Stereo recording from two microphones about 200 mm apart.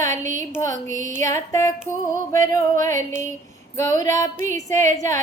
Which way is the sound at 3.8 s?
15° left (ahead or behind).